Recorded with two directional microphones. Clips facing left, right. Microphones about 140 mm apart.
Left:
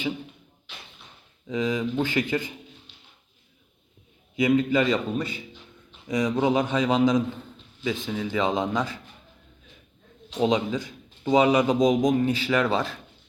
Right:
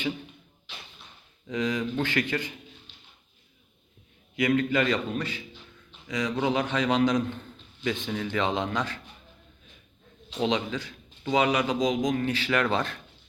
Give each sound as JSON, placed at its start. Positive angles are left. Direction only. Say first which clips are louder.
{"t": 1.5, "sound": "a man's voice", "louder": "left 2 dB", "side_deg": 5}
{"t": 4.4, "sound": "a man's voice", "louder": "left 3 dB", "side_deg": 10}
{"t": 6.1, "sound": "a man's voice", "louder": "left 4 dB", "side_deg": 20}
{"t": 10.5, "sound": "a man's voice", "louder": "left 4 dB", "side_deg": 15}